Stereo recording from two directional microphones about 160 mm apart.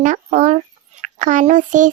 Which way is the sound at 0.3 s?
50° right (ahead or behind).